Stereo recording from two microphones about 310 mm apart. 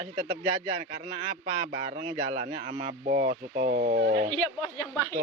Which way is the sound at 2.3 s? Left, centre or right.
Right.